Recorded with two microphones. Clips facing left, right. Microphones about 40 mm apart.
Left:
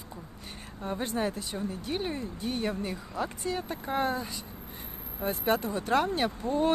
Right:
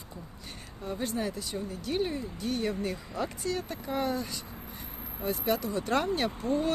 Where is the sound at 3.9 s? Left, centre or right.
Left.